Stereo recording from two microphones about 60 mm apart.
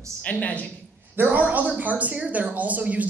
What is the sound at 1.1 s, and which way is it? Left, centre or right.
A woman's voice, right.